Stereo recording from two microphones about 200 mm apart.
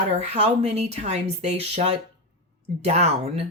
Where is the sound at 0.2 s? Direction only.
35° right (ahead or behind).